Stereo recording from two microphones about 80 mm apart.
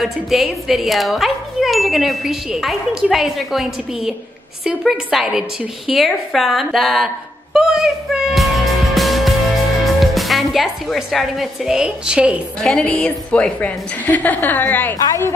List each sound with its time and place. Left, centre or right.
0.0 s a woman's voice: centre
7.5 s music: centre
9.9 s a woman's voice: centre
12.5 s a woman's voice: centre